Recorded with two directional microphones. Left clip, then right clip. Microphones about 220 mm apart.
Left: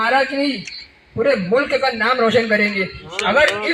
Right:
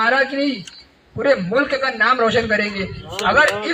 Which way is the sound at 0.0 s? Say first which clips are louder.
Even; 35° left (ahead or behind).